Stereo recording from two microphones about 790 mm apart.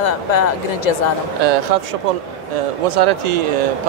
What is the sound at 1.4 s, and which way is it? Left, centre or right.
Speech, right.